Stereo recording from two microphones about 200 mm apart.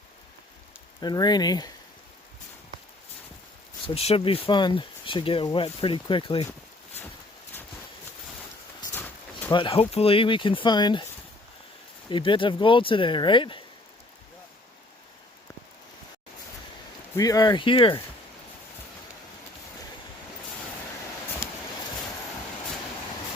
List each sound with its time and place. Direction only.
1.0 s speech: 20° left (ahead or behind)
3.8 s speech: 30° left (ahead or behind)
9.5 s speech: 25° left (ahead or behind)
17.2 s speech: 20° left (ahead or behind)